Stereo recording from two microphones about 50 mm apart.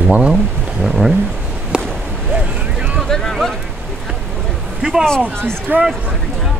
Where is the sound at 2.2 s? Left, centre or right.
Centre.